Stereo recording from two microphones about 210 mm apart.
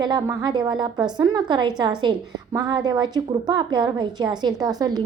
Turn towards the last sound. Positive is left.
turn(degrees=-20)  # may be behind; listen again after turning